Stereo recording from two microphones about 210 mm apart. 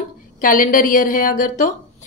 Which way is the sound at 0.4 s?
40° left (ahead or behind).